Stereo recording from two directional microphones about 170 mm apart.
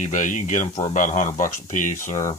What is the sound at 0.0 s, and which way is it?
Speech, 50° left (ahead or behind).